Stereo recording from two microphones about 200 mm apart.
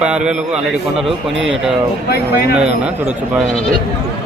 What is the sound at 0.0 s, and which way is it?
Speech, 5° right (ahead or behind).